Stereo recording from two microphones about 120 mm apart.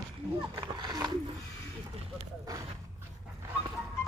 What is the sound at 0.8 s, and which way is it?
Speech, 35° right (ahead or behind).